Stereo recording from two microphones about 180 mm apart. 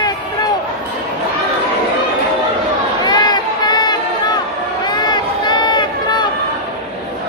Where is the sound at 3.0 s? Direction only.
25° left (ahead or behind).